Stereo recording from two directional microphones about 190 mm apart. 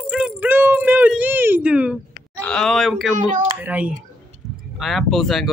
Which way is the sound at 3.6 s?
5° right (ahead or behind).